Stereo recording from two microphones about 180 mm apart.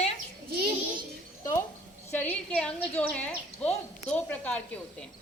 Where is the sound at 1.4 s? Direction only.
15° left (ahead or behind).